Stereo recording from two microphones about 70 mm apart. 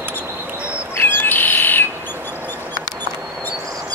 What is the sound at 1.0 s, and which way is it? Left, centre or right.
Bird, left.